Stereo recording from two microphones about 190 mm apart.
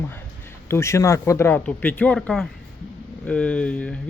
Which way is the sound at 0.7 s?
15° left (ahead or behind).